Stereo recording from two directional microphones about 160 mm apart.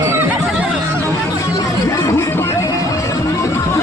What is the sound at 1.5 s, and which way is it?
Music, 20° left (ahead or behind).